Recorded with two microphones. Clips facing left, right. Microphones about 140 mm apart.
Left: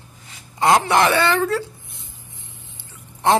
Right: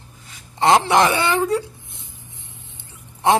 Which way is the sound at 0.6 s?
20° right (ahead or behind).